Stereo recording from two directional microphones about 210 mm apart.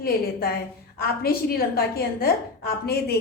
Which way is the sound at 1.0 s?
45° left (ahead or behind).